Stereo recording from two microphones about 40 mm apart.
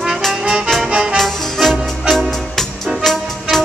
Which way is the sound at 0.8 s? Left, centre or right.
Right.